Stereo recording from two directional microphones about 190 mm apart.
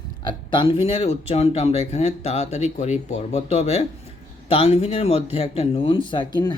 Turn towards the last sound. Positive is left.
turn(degrees=20)  # may be behind; listen again after turning